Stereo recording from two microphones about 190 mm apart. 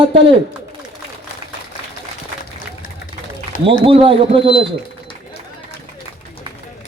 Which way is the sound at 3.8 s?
30° right (ahead or behind).